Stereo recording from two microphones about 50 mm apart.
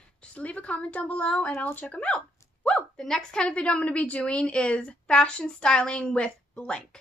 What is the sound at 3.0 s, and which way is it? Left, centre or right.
A woman's voice, centre.